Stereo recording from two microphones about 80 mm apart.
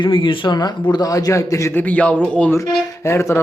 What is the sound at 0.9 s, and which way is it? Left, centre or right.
Speech, left.